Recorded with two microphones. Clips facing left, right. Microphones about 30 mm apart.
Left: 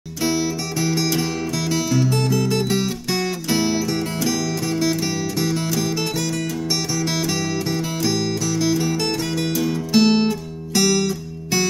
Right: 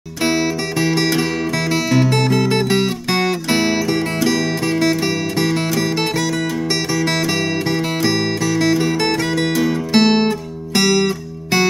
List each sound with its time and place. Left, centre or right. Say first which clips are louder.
0.2 s music: right 4 dB; right
7.0 s music: right 5 dB; right